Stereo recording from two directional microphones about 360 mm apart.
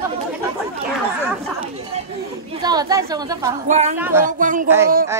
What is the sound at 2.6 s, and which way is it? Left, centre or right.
A woman's voice, centre.